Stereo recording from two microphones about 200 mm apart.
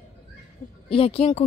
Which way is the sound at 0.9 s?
30° left (ahead or behind).